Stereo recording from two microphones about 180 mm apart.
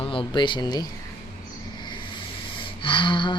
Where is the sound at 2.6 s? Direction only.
30° left (ahead or behind).